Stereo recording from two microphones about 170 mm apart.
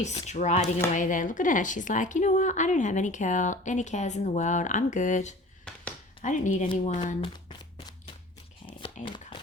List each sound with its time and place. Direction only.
0.3 s a woman's voice: 45° left (ahead or behind)
8.6 s dog: 30° left (ahead or behind)